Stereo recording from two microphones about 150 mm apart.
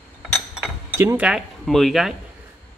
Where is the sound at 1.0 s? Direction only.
15° right (ahead or behind).